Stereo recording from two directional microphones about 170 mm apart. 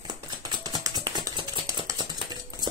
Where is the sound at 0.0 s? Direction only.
25° right (ahead or behind).